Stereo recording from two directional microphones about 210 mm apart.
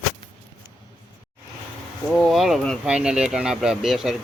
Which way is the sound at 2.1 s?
Centre (ahead or behind).